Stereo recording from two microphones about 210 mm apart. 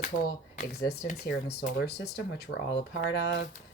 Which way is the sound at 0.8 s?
50° left (ahead or behind).